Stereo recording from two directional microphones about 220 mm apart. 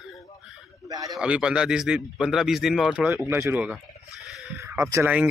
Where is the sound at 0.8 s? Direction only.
15° right (ahead or behind).